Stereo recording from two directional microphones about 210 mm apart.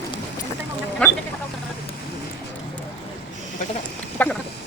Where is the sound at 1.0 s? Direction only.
5° left (ahead or behind).